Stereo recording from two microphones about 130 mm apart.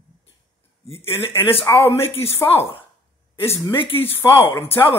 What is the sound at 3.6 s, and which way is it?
Speech, 45° left (ahead or behind).